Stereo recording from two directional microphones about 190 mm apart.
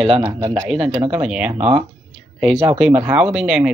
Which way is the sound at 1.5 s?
35° right (ahead or behind).